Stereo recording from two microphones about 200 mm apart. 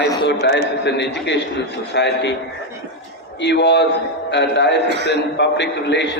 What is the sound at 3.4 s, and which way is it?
A man's voice, 60° left (ahead or behind).